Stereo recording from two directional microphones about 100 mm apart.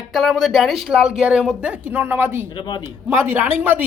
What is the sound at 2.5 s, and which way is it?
Speech, 50° left (ahead or behind).